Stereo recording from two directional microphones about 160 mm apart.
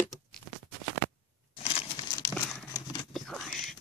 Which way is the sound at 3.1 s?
Centre (ahead or behind).